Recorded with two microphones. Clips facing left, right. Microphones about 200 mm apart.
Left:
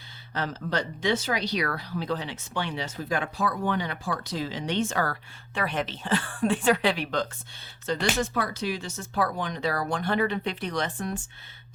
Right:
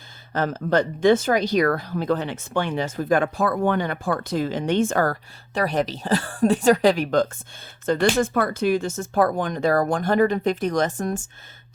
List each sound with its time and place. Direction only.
0.3 s a woman's voice: 50° right (ahead or behind)